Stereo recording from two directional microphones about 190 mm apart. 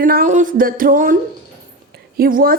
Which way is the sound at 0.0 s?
50° right (ahead or behind).